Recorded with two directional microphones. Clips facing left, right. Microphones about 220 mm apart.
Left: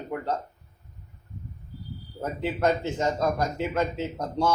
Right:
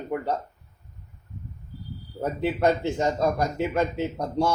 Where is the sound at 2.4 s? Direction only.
15° right (ahead or behind).